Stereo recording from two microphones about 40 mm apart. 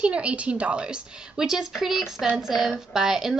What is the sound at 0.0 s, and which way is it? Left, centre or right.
Speech, right.